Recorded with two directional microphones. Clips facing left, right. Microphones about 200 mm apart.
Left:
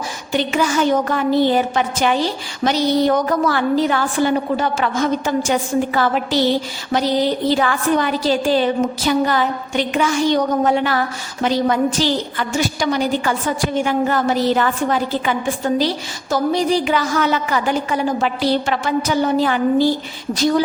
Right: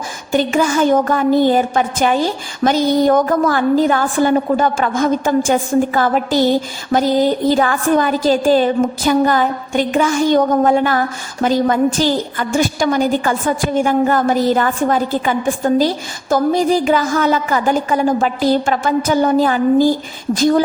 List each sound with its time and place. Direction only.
0.3 s a woman's voice: 45° right (ahead or behind)